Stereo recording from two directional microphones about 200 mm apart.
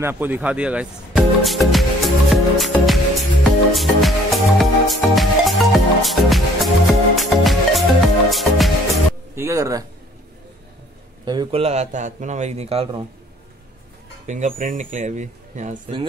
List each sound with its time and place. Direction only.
0.0 s music: 10° right (ahead or behind)
9.3 s speech: 15° right (ahead or behind)
11.2 s a man's voice: 25° right (ahead or behind)
14.2 s a man's voice: 35° right (ahead or behind)